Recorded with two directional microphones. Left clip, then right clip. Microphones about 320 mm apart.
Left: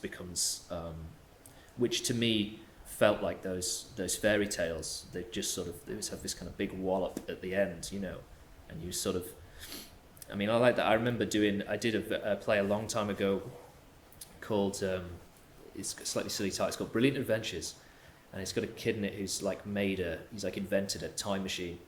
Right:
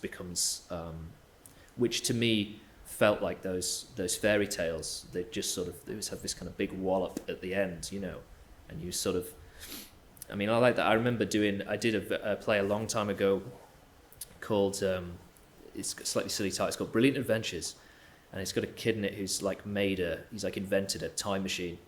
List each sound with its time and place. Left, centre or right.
0.0 s speech: right